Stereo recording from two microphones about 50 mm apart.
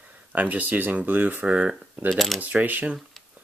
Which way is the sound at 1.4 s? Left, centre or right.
Right.